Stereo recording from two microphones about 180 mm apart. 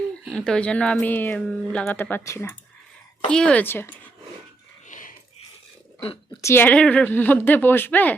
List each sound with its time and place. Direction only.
0.3 s speech: 5° left (ahead or behind)
3.2 s speech: 5° left (ahead or behind)
4.9 s a sound: 45° left (ahead or behind)
6.4 s speech: 10° left (ahead or behind)